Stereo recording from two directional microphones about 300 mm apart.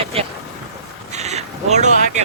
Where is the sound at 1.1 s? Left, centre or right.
Right.